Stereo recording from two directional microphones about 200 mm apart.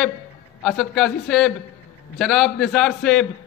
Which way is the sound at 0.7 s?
Centre (ahead or behind).